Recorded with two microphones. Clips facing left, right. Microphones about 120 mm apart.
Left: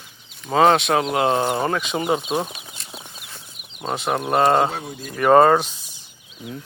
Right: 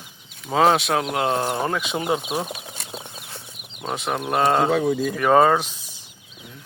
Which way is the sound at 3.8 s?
Centre (ahead or behind).